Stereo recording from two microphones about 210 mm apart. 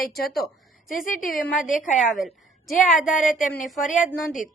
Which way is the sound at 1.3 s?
Centre (ahead or behind).